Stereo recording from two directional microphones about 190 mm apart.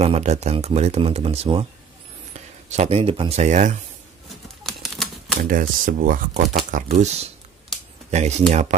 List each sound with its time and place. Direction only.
0.0 s speech: 35° right (ahead or behind)
4.6 s typewriter: centre (ahead or behind)
5.4 s speech: 45° right (ahead or behind)
8.1 s speech: 35° right (ahead or behind)